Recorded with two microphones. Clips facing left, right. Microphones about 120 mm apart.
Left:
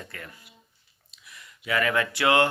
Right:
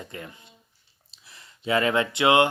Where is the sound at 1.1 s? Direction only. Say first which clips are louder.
Left 2 dB; 30° right (ahead or behind).